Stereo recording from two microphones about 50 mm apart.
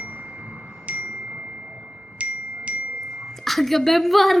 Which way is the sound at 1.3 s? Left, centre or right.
Centre.